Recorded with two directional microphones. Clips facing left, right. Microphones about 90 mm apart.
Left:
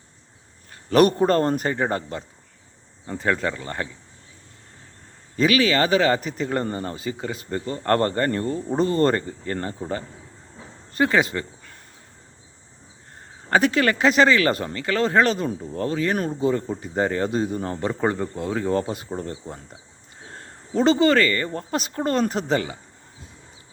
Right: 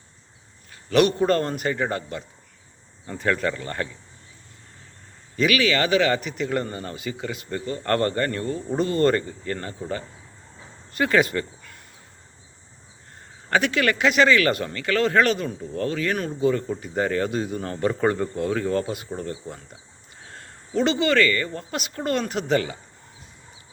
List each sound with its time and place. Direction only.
0.7 s speech: 40° left (ahead or behind); by 3.8 s 20° left (ahead or behind)
5.4 s speech: 35° left (ahead or behind)
13.5 s speech: 35° left (ahead or behind)